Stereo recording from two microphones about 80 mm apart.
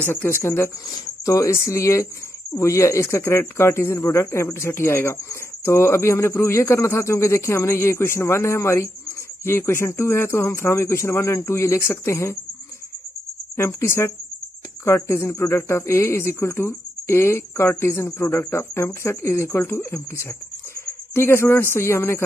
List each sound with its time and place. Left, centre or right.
0.0 s speech: left
0.9 s speech: left
13.7 s speech: left